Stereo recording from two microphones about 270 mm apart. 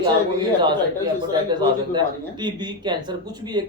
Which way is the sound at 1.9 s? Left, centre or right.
Centre.